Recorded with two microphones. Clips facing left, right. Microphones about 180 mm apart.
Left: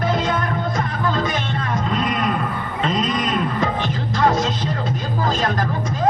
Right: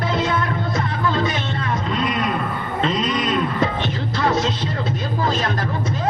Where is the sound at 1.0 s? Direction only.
45° left (ahead or behind).